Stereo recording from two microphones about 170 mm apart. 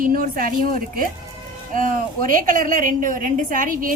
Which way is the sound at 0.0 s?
55° right (ahead or behind).